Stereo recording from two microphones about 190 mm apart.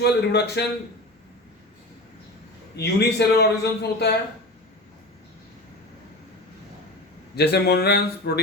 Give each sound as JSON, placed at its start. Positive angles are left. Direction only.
{"t": 0.0, "sound": "a man's voice", "side_deg": 60}
{"t": 2.7, "sound": "a man's voice", "side_deg": 60}
{"t": 7.3, "sound": "a man's voice", "side_deg": 60}